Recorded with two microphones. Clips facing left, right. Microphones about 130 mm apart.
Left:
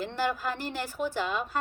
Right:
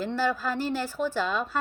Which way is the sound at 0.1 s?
15° left (ahead or behind).